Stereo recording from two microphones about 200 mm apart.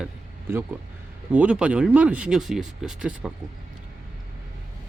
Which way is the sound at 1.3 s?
5° right (ahead or behind).